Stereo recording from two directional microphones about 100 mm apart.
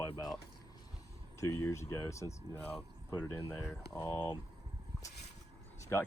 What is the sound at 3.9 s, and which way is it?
Speech, 40° left (ahead or behind).